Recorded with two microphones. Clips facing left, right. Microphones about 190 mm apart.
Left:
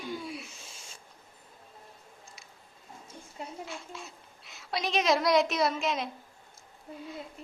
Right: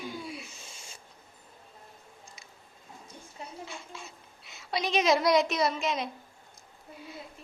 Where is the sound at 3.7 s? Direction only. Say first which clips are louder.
Left 2 dB; centre (ahead or behind).